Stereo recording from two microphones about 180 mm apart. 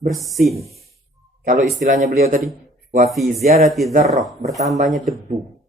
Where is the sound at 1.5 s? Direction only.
45° right (ahead or behind).